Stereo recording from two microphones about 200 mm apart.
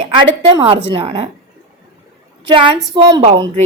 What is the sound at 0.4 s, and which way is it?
Speech, 25° right (ahead or behind).